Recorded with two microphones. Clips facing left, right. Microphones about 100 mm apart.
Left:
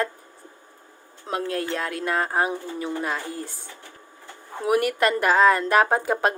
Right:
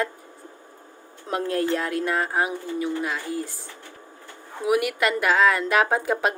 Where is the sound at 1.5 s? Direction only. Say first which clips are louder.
Right 6 dB; 25° right (ahead or behind).